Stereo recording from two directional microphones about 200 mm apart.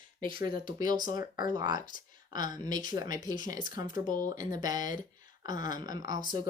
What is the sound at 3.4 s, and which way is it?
Speech, 40° left (ahead or behind).